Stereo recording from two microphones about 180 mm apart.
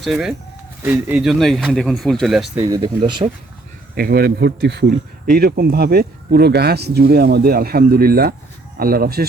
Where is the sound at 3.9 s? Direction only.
55° right (ahead or behind).